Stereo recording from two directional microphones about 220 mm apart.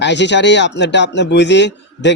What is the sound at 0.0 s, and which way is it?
Speech, 55° left (ahead or behind).